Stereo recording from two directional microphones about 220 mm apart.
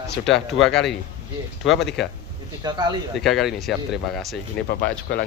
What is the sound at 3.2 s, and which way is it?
Speech, centre (ahead or behind).